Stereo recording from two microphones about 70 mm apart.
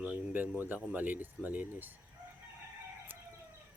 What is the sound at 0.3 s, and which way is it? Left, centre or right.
Speech, right.